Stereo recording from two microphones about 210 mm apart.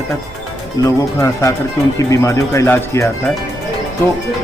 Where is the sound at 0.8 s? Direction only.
15° left (ahead or behind).